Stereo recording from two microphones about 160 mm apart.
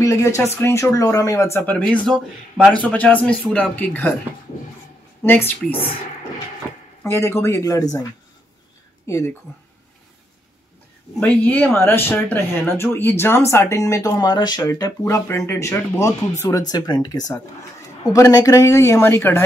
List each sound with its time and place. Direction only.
0.0 s speech: 20° left (ahead or behind)
5.2 s speech: 15° left (ahead or behind)
7.0 s speech: 15° left (ahead or behind)
9.0 s speech: 20° left (ahead or behind)
11.1 s speech: 10° left (ahead or behind)